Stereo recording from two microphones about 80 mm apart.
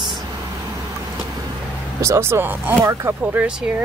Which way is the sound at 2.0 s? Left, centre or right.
Right.